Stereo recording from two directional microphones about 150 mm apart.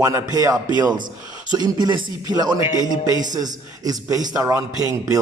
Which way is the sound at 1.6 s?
30° right (ahead or behind).